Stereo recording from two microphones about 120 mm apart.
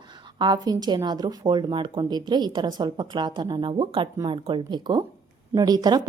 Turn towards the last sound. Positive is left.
turn(degrees=-35)  # may be behind; listen again after turning